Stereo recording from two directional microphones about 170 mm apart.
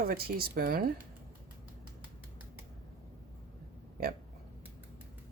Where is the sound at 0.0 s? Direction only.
60° right (ahead or behind).